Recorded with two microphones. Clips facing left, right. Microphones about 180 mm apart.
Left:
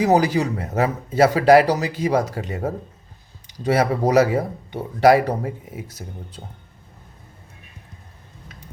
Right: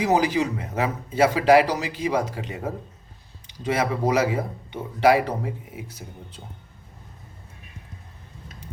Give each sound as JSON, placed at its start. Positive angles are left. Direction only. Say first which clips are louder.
{"t": 0.0, "sound": "speech", "louder": "left 3 dB", "side_deg": 40}